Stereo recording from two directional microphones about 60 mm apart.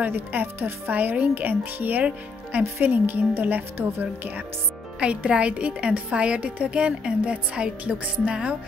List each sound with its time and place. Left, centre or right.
0.0 s a woman's voice: right
5.0 s a woman's voice: centre